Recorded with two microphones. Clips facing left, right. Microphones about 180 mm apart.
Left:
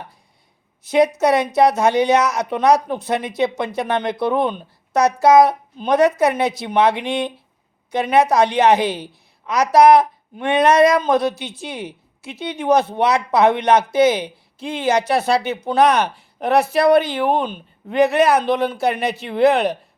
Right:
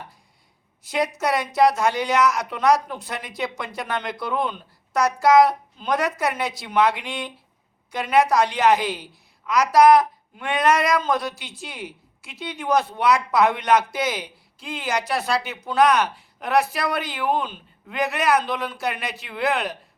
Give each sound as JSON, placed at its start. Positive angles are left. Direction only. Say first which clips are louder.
{"t": 0.9, "sound": "a woman's voice", "louder": "left 8 dB", "side_deg": 20}